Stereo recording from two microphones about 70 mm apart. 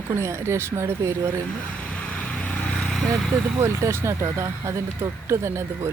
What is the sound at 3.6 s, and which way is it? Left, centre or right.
Speech, right.